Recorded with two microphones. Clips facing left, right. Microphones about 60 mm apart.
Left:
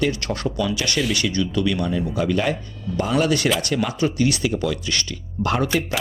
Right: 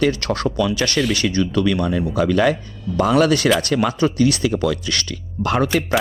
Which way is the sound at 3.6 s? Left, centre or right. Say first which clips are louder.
Right 4 dB; right.